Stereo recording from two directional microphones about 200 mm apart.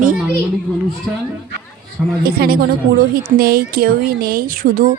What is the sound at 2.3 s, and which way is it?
Speech, 50° right (ahead or behind).